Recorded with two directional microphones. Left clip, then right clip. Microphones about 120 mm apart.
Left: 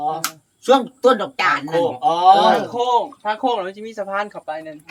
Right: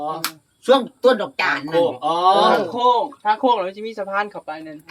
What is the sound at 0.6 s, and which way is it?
Speech, 35° left (ahead or behind).